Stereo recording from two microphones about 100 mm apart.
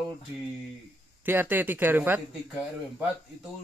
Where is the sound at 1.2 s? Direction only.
20° right (ahead or behind).